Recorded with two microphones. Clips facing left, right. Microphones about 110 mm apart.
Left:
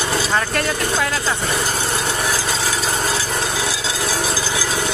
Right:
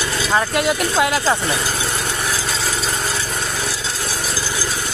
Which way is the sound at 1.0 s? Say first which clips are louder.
Right 4 dB; 20° right (ahead or behind).